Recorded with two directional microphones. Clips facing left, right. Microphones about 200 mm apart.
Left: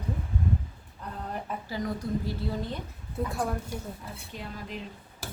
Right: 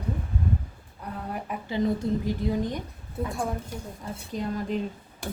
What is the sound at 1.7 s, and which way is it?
A woman's voice, 25° right (ahead or behind).